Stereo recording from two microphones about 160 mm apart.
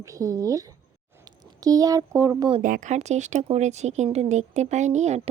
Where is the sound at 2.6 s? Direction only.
55° right (ahead or behind).